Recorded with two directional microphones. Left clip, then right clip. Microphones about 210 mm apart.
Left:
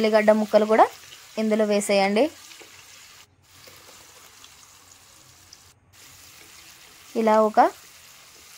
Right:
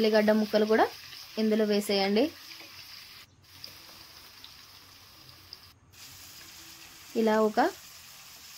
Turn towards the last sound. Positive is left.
turn(degrees=15)  # may be behind; listen again after turning